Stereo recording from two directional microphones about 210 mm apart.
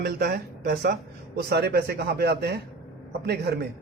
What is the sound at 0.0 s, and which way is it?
A man's voice, 50° right (ahead or behind).